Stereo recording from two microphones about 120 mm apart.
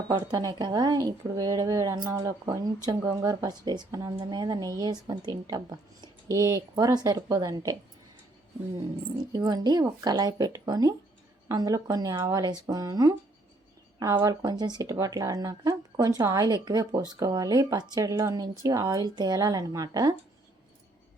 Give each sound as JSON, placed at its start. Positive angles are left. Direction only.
{"t": 0.3, "sound": "speech", "side_deg": -35}
{"t": 9.3, "sound": "speech", "side_deg": -35}
{"t": 14.2, "sound": "speech", "side_deg": -35}